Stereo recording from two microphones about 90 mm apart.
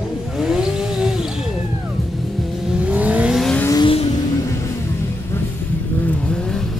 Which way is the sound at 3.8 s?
90° left.